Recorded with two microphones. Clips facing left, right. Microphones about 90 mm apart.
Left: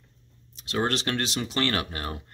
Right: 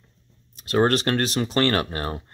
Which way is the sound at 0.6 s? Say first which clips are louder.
Right 7 dB; 45° right (ahead or behind).